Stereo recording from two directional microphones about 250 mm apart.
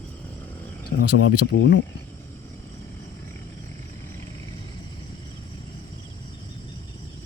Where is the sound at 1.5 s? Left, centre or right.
Left.